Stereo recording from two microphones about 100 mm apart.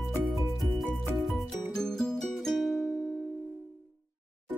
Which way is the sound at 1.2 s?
Centre (ahead or behind).